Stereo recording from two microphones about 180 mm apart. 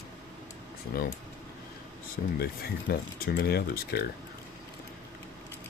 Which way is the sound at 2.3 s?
60° left (ahead or behind).